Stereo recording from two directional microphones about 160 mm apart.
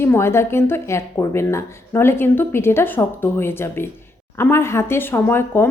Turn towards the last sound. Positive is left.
turn(degrees=15)  # may be behind; listen again after turning